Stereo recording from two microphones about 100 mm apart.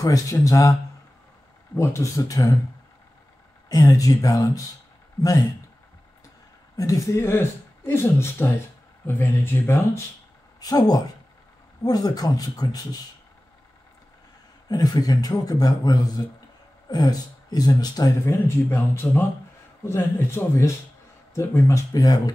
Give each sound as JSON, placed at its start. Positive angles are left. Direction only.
{"t": 0.0, "sound": "speech", "side_deg": 35}
{"t": 1.8, "sound": "speech", "side_deg": 30}
{"t": 3.6, "sound": "speech", "side_deg": 35}
{"t": 6.8, "sound": "speech", "side_deg": 35}
{"t": 10.6, "sound": "speech", "side_deg": 40}
{"t": 14.7, "sound": "speech", "side_deg": 40}